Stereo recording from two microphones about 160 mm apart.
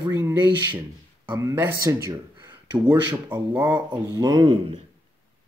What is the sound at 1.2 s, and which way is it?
Speech, 30° right (ahead or behind).